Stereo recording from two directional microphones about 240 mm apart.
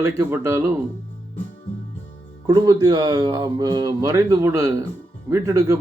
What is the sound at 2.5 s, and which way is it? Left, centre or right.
A man's voice, centre.